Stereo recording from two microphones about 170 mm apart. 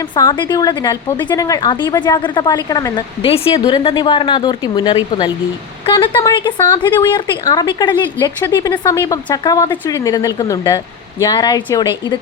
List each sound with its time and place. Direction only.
0.2 s a woman's voice: 25° left (ahead or behind)